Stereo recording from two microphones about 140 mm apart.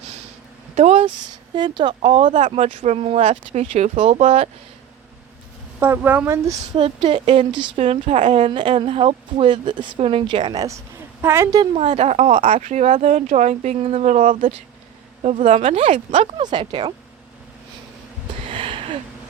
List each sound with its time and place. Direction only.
0.8 s speech: 50° right (ahead or behind)
1.5 s a woman's voice: 35° right (ahead or behind)
2.2 s speech: 60° right (ahead or behind)
5.8 s speech: 15° right (ahead or behind)
6.7 s a woman's voice: 40° right (ahead or behind)
7.8 s a woman's voice: 55° right (ahead or behind); by 11.6 s 20° right (ahead or behind)
11.6 s a woman's voice: 35° right (ahead or behind)
11.9 s speech: 55° right (ahead or behind); by 14.5 s 70° right (ahead or behind)
15.2 s speech: 50° right (ahead or behind)
16.4 s a woman's voice: 35° right (ahead or behind)
18.4 s a sound: 40° right (ahead or behind)